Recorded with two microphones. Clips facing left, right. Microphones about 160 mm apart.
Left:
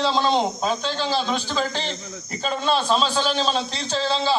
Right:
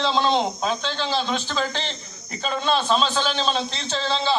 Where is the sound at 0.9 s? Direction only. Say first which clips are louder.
Left 1 dB; 40° left (ahead or behind).